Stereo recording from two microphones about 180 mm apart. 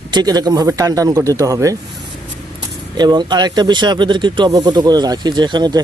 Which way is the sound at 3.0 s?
25° right (ahead or behind).